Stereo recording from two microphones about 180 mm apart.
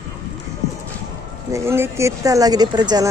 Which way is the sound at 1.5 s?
15° right (ahead or behind).